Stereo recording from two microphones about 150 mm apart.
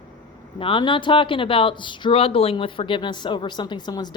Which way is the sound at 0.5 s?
35° left (ahead or behind).